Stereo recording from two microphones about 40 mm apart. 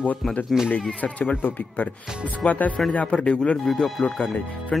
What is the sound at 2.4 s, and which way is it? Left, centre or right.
Speech, left.